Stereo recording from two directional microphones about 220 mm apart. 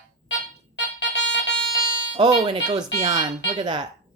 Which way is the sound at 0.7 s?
55° left (ahead or behind).